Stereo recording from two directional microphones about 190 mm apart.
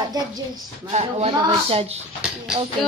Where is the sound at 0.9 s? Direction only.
35° right (ahead or behind).